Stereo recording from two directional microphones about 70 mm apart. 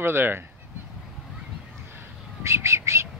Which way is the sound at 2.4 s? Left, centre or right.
Right.